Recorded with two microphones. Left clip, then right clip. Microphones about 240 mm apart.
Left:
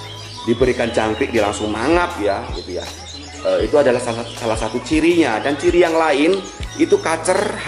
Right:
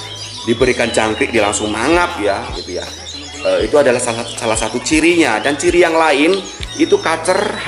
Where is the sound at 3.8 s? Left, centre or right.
Centre.